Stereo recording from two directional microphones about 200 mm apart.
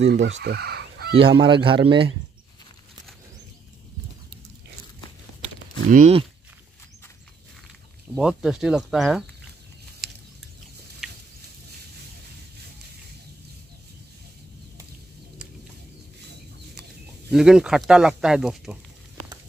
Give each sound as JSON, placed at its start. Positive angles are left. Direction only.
{"t": 0.0, "sound": "speech", "side_deg": -65}
{"t": 1.1, "sound": "speech", "side_deg": -25}
{"t": 5.4, "sound": "a sound", "side_deg": -35}
{"t": 8.2, "sound": "speech", "side_deg": -5}
{"t": 17.3, "sound": "speech", "side_deg": -5}